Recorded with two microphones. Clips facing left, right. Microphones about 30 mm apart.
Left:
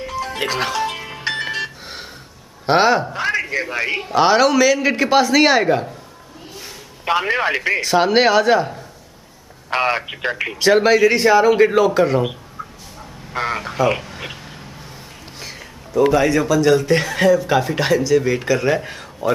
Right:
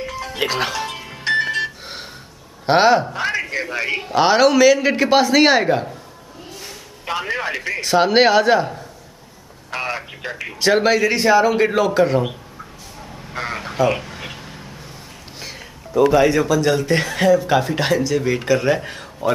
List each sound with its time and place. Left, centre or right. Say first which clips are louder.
0.4 s speech: even; centre
0.9 s music: right 4 dB; centre
2.6 s a man's voice: right 1 dB; centre
7.1 s a man's voice: left 5 dB; centre
7.8 s a man's voice: right 2 dB; centre
9.7 s speech: left 6 dB; left
10.6 s a man's voice: left 3 dB; centre
13.3 s duck: left 4 dB; centre
16.1 s a man's voice: right 1 dB; centre